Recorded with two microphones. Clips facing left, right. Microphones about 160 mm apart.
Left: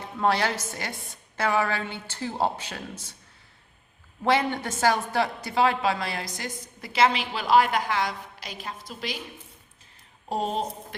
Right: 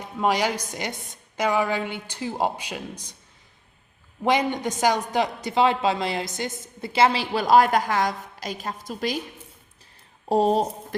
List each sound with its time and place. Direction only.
0.0 s a woman's voice: 15° right (ahead or behind)
4.2 s a man's voice: 15° right (ahead or behind); by 9.1 s 45° right (ahead or behind)
10.2 s speech: 35° right (ahead or behind)